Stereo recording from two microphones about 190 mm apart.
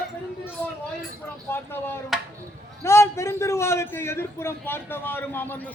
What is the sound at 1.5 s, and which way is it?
A man's voice, 10° left (ahead or behind).